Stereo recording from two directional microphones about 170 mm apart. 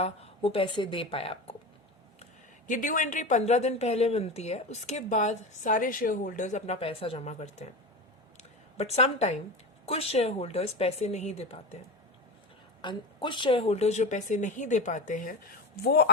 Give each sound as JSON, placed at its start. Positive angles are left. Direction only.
{"t": 0.0, "sound": "a woman's voice", "side_deg": 35}
{"t": 2.6, "sound": "a woman's voice", "side_deg": 50}
{"t": 8.8, "sound": "a woman's voice", "side_deg": 40}
{"t": 12.8, "sound": "a woman's voice", "side_deg": 30}